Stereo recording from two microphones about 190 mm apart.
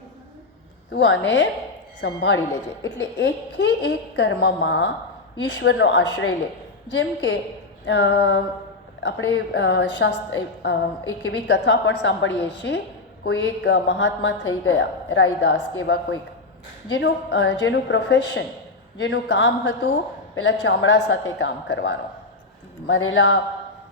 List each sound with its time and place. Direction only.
0.9 s a woman's voice: 70° left (ahead or behind)
6.9 s a woman's voice: 65° left (ahead or behind)
9.0 s a woman's voice: 65° left (ahead or behind)
22.9 s a man's voice: 90° left